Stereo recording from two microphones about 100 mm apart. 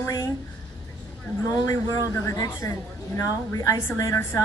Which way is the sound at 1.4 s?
30° left (ahead or behind).